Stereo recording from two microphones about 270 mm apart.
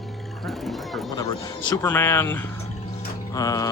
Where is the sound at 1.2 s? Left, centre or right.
Centre.